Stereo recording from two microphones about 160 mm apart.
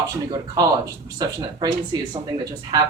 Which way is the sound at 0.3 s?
20° right (ahead or behind).